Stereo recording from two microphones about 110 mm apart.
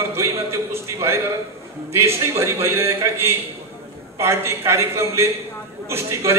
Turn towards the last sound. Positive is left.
turn(degrees=-25)  # may be behind; listen again after turning